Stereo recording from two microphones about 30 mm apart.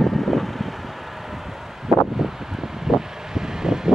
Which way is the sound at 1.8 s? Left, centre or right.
Centre.